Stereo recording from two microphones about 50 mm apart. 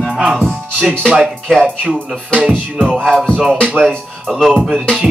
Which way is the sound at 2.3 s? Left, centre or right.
Right.